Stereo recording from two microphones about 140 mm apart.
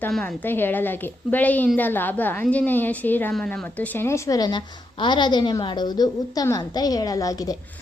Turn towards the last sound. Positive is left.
turn(degrees=25)  # may be behind; listen again after turning